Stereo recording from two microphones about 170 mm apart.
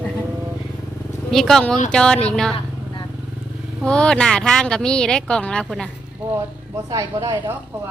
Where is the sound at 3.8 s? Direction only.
5° left (ahead or behind).